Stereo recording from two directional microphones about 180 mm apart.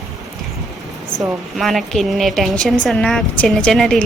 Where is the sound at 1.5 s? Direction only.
Centre (ahead or behind).